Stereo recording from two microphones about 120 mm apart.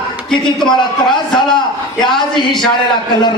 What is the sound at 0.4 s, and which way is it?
Speech, 40° left (ahead or behind).